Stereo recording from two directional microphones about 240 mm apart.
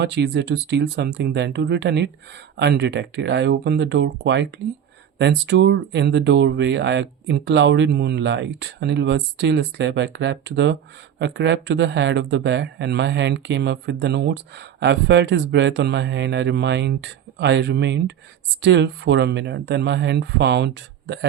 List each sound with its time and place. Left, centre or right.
0.0 s speech: right